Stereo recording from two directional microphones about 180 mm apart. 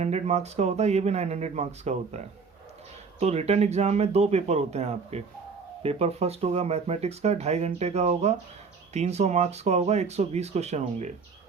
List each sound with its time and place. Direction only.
0.0 s speech: 35° right (ahead or behind)